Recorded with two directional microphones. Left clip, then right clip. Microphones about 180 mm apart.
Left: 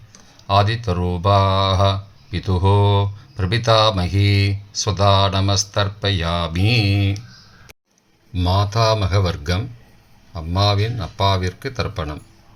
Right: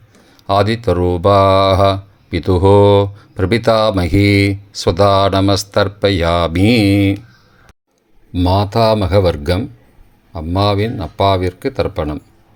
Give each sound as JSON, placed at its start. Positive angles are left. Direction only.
{"t": 0.3, "sound": "speech", "side_deg": -45}
{"t": 8.4, "sound": "speech", "side_deg": -40}